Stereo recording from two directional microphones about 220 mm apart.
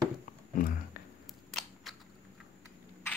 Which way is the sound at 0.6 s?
40° left (ahead or behind).